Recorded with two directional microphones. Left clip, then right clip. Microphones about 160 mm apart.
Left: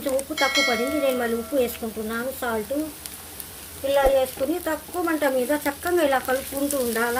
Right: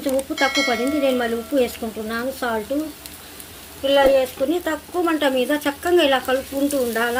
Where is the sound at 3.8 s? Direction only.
20° right (ahead or behind).